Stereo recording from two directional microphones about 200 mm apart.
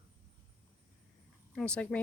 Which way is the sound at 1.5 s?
5° left (ahead or behind).